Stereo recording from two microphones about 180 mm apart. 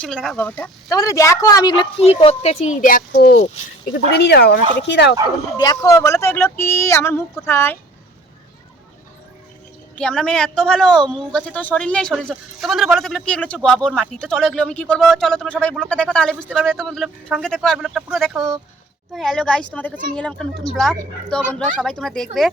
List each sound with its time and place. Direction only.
0.0 s speech: centre (ahead or behind)
0.9 s a woman's voice: 20° left (ahead or behind); by 5.1 s 70° left (ahead or behind)
5.5 s speech: 20° left (ahead or behind)
10.0 s speech: 5° left (ahead or behind)